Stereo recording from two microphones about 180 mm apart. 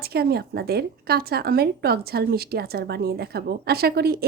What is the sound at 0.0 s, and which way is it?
A woman's voice, 60° right (ahead or behind).